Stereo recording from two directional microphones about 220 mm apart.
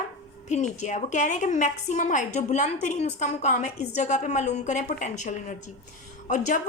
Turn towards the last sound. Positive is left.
turn(degrees=35)  # may be behind; listen again after turning